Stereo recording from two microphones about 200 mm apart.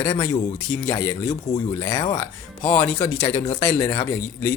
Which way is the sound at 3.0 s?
15° left (ahead or behind).